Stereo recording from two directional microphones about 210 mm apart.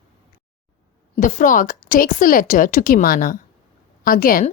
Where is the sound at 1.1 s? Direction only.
40° left (ahead or behind).